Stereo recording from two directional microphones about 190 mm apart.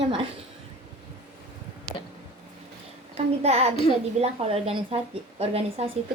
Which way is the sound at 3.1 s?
35° right (ahead or behind).